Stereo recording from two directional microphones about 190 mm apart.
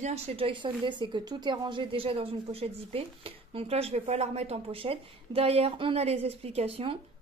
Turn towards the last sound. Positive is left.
turn(degrees=-30)  # may be behind; listen again after turning